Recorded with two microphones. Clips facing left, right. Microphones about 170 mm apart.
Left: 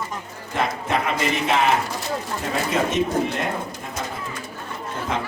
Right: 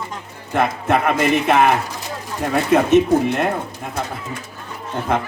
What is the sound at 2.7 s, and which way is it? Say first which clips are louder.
Speech: right 9 dB; 60° right (ahead or behind).